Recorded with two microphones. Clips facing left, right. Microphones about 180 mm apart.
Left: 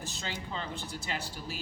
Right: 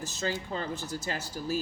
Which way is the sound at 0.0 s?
40° right (ahead or behind).